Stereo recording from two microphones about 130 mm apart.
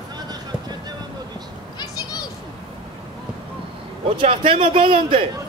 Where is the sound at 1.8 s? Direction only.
30° left (ahead or behind).